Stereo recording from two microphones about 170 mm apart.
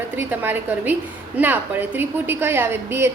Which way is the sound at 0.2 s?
10° right (ahead or behind).